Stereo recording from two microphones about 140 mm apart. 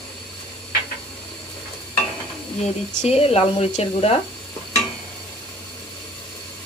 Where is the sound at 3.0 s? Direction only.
45° left (ahead or behind).